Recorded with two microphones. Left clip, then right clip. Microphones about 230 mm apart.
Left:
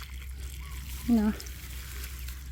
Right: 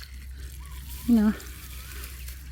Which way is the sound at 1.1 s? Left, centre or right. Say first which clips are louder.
Right 4 dB; right.